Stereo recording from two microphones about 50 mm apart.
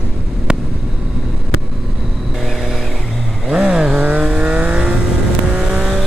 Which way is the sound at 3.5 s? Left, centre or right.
Right.